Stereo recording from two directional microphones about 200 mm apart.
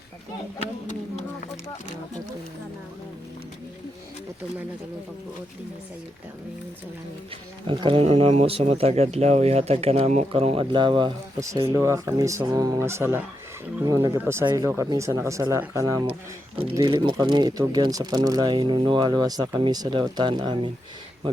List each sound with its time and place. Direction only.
7.7 s speech: 25° right (ahead or behind)